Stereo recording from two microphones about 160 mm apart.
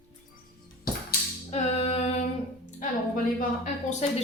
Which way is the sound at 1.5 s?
40° left (ahead or behind).